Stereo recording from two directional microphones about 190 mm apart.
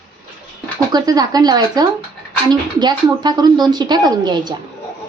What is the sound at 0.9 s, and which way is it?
A woman's voice, 20° right (ahead or behind).